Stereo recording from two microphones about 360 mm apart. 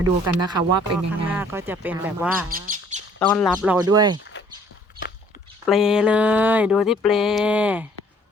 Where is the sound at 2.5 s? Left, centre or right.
Right.